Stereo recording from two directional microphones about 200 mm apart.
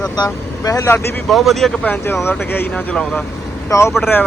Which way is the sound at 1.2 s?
Centre (ahead or behind).